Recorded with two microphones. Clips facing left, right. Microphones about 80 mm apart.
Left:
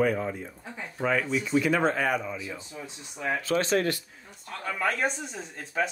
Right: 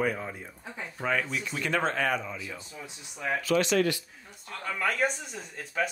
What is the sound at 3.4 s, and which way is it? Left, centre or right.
Speech, left.